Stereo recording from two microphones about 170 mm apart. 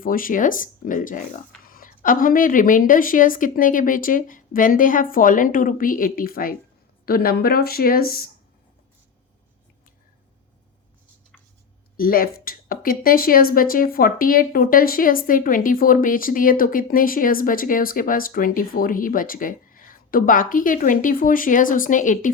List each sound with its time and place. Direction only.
0.0 s speech: 55° left (ahead or behind)
11.9 s speech: 60° left (ahead or behind)